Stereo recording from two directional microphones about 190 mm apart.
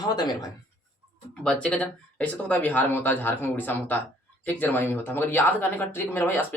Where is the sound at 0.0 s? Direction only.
20° left (ahead or behind).